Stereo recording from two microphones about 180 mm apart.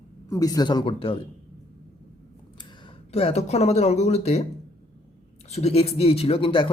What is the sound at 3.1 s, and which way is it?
Speech, 35° left (ahead or behind).